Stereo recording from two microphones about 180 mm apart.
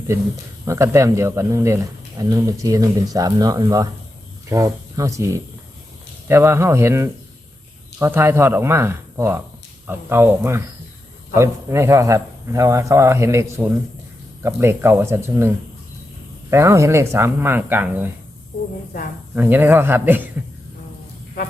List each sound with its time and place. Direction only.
0.7 s speech: 15° right (ahead or behind)
19.3 s speech: 10° right (ahead or behind)